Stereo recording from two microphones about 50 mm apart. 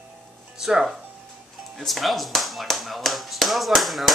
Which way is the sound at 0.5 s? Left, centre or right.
Centre.